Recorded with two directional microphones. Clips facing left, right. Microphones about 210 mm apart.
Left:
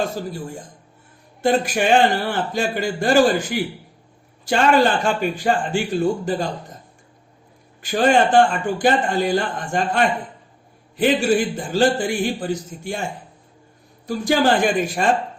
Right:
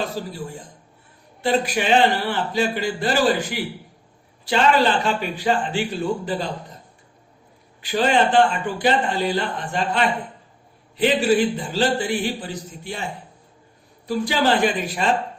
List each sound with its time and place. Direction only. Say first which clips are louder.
0.2 s a man's voice: left 2 dB; 50° left (ahead or behind)
1.4 s a man's voice: left 2 dB; 50° left (ahead or behind)
7.8 s a man's voice: left 3 dB; 50° left (ahead or behind)
14.1 s a man's voice: left 2 dB; 45° left (ahead or behind)